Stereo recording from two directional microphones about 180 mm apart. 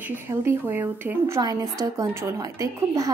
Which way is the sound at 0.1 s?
10° right (ahead or behind).